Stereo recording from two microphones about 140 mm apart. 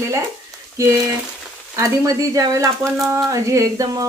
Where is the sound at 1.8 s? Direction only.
25° right (ahead or behind).